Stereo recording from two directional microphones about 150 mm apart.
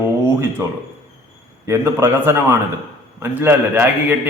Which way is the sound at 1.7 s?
15° right (ahead or behind).